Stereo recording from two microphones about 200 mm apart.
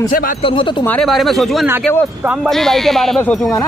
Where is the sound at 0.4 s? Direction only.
25° left (ahead or behind).